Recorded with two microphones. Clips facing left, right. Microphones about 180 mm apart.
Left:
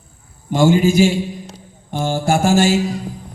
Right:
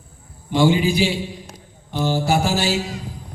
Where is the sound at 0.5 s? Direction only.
45° left (ahead or behind).